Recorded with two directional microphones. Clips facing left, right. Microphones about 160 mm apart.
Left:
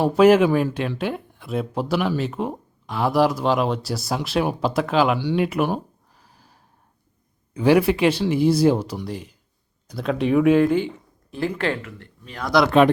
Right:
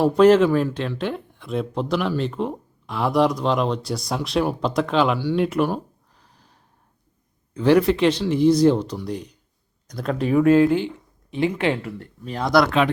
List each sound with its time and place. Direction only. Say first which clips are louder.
0.0 s speech: even; 5° left (ahead or behind)
5.4 s a sound: right 1 dB; 5° left (ahead or behind)
7.5 s speech: even; 10° left (ahead or behind)
11.4 s speech: right 2 dB; 15° right (ahead or behind)
11.8 s speech: right 6 dB; 40° right (ahead or behind)